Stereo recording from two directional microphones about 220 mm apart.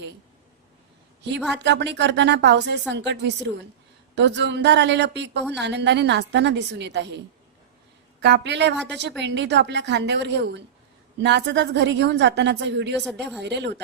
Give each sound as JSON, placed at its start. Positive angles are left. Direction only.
{"t": 1.5, "sound": "a woman's voice", "side_deg": -50}
{"t": 8.2, "sound": "a woman's voice", "side_deg": -50}